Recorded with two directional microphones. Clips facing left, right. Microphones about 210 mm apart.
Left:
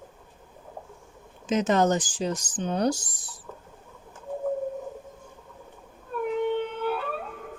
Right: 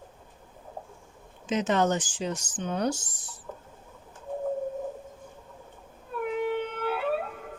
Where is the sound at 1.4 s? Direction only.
40° left (ahead or behind).